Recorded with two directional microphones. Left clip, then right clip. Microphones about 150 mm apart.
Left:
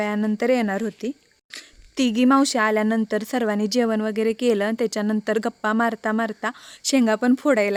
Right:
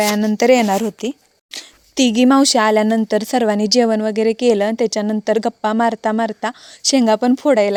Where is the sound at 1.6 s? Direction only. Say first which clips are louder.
Right 7 dB; 35° right (ahead or behind).